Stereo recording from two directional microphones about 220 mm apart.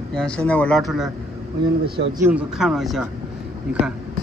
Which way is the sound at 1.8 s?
45° right (ahead or behind).